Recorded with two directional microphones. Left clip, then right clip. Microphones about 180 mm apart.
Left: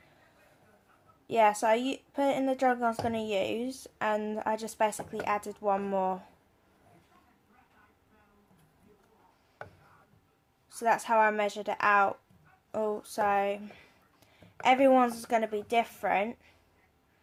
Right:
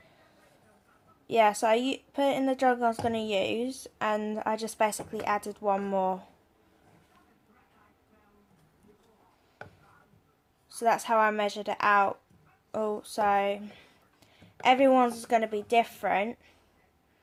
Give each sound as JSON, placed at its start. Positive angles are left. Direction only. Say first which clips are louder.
{"t": 1.3, "sound": "a woman's voice", "louder": "right 1 dB", "side_deg": -5}
{"t": 10.7, "sound": "a woman's voice", "louder": "right 1 dB", "side_deg": -5}